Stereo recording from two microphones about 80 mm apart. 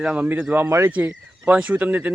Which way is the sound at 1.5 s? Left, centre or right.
Centre.